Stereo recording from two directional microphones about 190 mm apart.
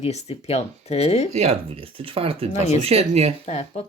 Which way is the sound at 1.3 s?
35° right (ahead or behind).